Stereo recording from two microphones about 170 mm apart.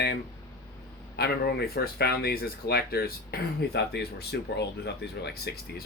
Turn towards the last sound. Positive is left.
turn(degrees=65)  # may be behind; listen again after turning